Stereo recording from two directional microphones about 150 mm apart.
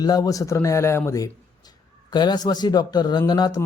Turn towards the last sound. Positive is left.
turn(degrees=30)  # may be behind; listen again after turning